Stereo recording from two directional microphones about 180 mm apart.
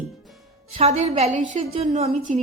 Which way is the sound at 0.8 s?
35° right (ahead or behind).